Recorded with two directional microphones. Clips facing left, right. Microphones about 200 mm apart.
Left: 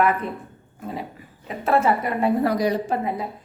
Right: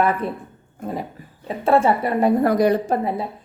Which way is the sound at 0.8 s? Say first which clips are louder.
Right 4 dB; 45° right (ahead or behind).